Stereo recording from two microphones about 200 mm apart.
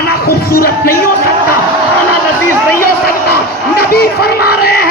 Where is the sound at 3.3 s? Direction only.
50° left (ahead or behind).